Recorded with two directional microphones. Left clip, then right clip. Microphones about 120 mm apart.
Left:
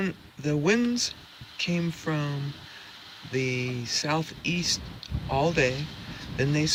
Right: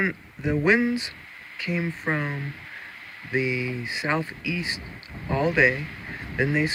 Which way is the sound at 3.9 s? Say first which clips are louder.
Right 1 dB; 25° left (ahead or behind).